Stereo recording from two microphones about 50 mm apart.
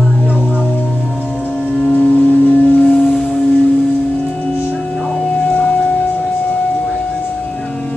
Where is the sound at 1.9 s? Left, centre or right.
Left.